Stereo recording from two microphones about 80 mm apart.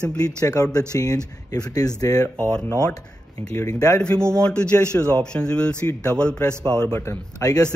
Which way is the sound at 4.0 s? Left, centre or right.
Centre.